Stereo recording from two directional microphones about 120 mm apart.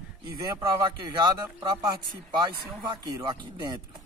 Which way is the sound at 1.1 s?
30° right (ahead or behind).